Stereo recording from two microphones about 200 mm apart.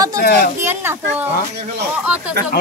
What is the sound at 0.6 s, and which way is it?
Speech, 10° right (ahead or behind).